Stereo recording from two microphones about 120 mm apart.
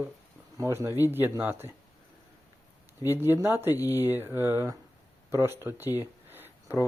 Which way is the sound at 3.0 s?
20° right (ahead or behind).